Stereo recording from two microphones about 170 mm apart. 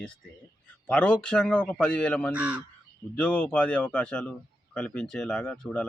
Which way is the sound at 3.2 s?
10° left (ahead or behind).